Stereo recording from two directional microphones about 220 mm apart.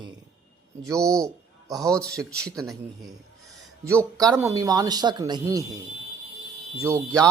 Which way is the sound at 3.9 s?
10° right (ahead or behind).